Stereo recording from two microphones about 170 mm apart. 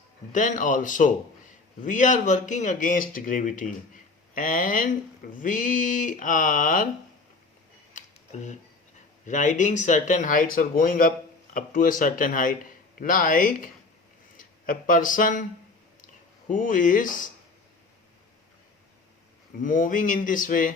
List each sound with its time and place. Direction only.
0.3 s speech: 50° left (ahead or behind)
7.9 s a sound: 45° left (ahead or behind)
9.2 s speech: 45° left (ahead or behind)
16.5 s speech: 50° left (ahead or behind)
19.6 s speech: 50° left (ahead or behind)